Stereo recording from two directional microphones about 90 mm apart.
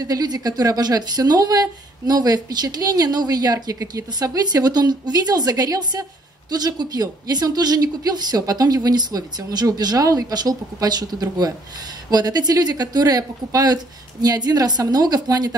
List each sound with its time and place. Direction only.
0.0 s speech: 45° right (ahead or behind)